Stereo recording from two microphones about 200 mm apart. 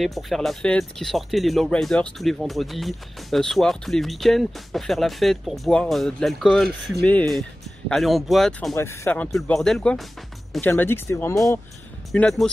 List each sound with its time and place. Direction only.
0.0 s speech: centre (ahead or behind)